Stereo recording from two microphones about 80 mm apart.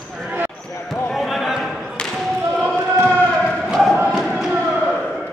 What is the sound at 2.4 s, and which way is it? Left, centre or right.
Basketball bounce, right.